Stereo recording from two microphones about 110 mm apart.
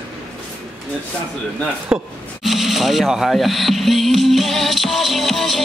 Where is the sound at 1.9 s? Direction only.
10° right (ahead or behind).